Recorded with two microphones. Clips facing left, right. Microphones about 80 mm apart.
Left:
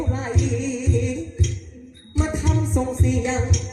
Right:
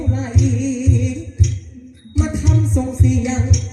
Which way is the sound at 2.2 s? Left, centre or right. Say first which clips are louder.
Right 3 dB; left.